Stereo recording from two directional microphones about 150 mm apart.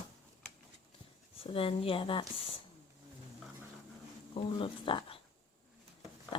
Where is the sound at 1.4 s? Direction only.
40° left (ahead or behind).